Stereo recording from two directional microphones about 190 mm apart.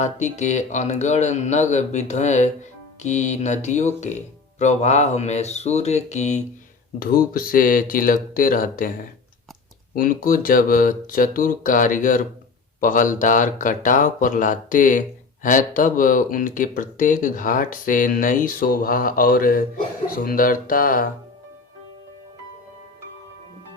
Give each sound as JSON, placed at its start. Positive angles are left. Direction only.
{"t": 0.0, "sound": "speech", "side_deg": 40}
{"t": 7.3, "sound": "speech", "side_deg": 50}
{"t": 9.9, "sound": "speech", "side_deg": 50}